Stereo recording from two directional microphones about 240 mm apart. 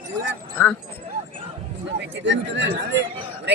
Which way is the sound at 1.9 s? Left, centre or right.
Right.